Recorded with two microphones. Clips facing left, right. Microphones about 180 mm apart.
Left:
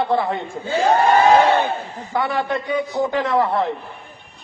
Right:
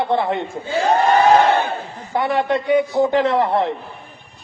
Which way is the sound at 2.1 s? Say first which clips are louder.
Right 3 dB; 20° right (ahead or behind).